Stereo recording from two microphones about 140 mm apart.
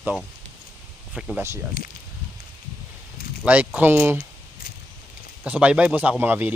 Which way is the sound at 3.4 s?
10° right (ahead or behind).